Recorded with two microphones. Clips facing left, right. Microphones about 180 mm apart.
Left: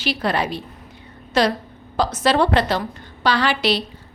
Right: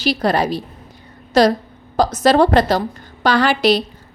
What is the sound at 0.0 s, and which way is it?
A woman's voice, 40° right (ahead or behind).